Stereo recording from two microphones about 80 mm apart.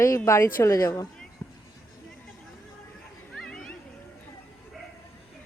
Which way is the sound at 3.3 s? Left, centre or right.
Centre.